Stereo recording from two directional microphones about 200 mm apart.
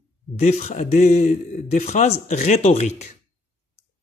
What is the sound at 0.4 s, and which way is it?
Speech, 30° left (ahead or behind).